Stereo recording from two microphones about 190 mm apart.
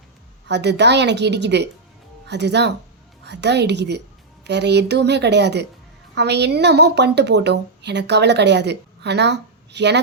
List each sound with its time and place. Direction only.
0.4 s a woman's voice: 65° right (ahead or behind)